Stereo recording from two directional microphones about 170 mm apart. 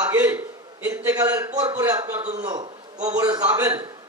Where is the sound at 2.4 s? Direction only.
20° right (ahead or behind).